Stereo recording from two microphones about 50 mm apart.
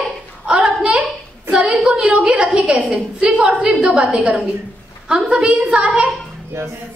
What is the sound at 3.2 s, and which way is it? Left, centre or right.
Speech, right.